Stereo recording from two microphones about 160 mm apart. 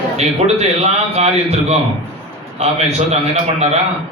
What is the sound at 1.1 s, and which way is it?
A man's voice, 40° right (ahead or behind).